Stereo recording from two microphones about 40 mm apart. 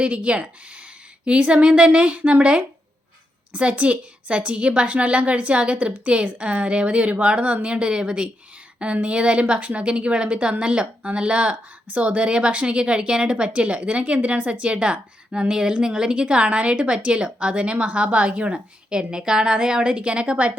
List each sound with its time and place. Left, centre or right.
0.0 s a woman's voice: right